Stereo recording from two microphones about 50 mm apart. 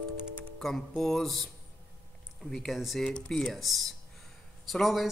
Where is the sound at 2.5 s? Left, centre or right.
Centre.